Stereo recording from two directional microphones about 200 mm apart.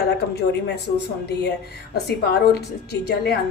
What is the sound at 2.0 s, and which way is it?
A woman's voice, 55° left (ahead or behind).